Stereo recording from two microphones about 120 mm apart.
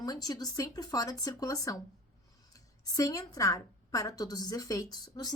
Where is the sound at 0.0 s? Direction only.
30° left (ahead or behind).